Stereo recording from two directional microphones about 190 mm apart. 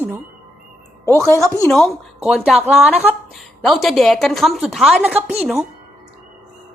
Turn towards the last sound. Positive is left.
turn(degrees=0)  # may be behind; listen again after turning